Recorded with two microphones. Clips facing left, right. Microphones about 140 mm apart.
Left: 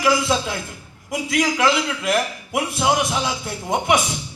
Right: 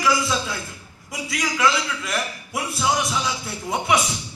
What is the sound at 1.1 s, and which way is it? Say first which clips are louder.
A man's voice: left 6 dB; 55° left (ahead or behind).